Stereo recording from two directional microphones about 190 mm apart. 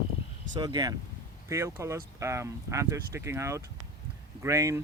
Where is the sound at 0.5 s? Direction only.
20° right (ahead or behind).